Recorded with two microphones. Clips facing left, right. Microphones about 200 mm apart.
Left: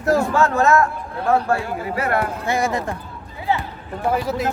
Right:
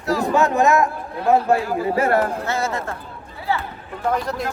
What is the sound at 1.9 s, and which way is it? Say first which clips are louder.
Speech: right 4 dB; 30° right (ahead or behind).